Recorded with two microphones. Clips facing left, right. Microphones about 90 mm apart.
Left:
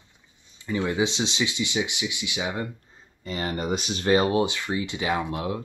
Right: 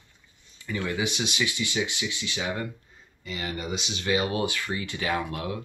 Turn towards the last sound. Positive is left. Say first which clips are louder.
# left 2 dB
turn(degrees=25)  # may be behind; listen again after turning